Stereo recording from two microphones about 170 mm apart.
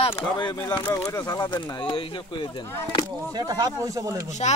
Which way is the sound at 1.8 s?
30° left (ahead or behind).